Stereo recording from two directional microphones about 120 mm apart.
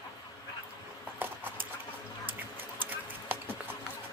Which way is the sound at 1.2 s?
15° right (ahead or behind).